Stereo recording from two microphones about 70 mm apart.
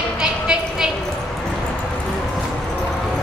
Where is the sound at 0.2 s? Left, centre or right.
Centre.